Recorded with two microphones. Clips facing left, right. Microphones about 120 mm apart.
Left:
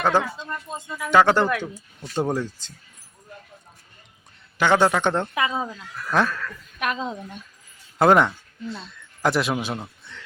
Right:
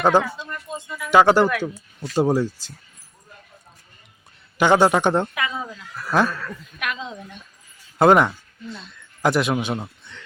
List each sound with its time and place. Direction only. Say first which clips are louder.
0.0 s speech: right 3 dB; 15° right (ahead or behind)
4.5 s speech: right 3 dB; 15° right (ahead or behind)
5.3 s speech: left 3 dB; 30° left (ahead or behind)
6.0 s speech: right 2 dB; 5° right (ahead or behind)
6.7 s a woman's voice: left 4 dB; 35° left (ahead or behind)
7.9 s a man's voice: right 2 dB; centre (ahead or behind)